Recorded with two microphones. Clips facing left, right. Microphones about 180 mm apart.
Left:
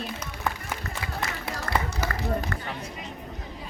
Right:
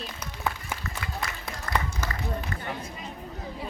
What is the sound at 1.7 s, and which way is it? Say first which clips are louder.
Run: left 1 dB; 50° left (ahead or behind).